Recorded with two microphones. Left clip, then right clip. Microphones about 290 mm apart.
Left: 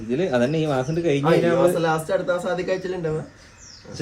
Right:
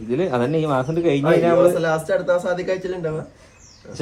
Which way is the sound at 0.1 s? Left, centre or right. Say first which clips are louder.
Right 1 dB; centre.